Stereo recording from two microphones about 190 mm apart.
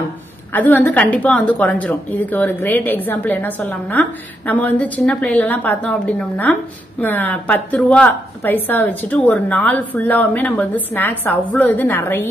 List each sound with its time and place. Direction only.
0.5 s a woman's voice: 10° left (ahead or behind)